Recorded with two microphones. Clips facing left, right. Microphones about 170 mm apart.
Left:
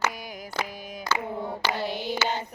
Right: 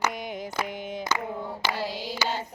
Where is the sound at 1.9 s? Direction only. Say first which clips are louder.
Left 4 dB; 60° left (ahead or behind).